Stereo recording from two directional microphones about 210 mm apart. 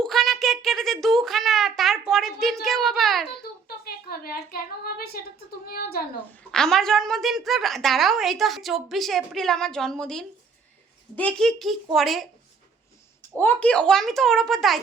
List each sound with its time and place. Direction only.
0.0 s a sound: centre (ahead or behind)
3.8 s a woman's voice: 45° left (ahead or behind)
6.5 s a woman's voice: centre (ahead or behind)
13.4 s a woman's voice: 10° left (ahead or behind)